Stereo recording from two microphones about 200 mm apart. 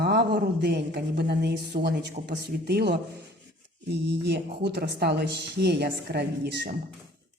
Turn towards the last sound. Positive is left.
turn(degrees=-55)  # may be behind; listen again after turning